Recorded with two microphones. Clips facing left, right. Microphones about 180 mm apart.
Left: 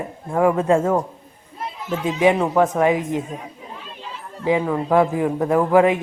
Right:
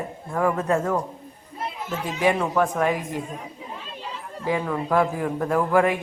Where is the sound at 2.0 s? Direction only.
20° left (ahead or behind).